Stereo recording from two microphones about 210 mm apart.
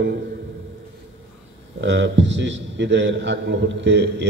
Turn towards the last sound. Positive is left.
turn(degrees=-55)  # may be behind; listen again after turning